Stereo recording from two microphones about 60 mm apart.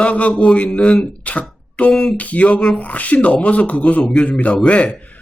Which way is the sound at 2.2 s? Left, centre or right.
Left.